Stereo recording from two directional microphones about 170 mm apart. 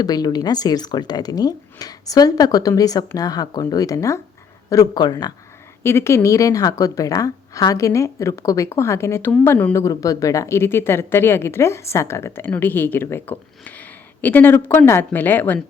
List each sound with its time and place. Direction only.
0.0 s a woman's voice: 25° left (ahead or behind)